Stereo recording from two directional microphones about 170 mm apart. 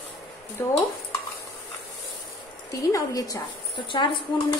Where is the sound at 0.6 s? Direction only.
15° left (ahead or behind).